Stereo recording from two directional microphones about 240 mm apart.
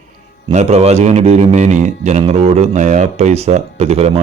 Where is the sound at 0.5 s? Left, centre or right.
Right.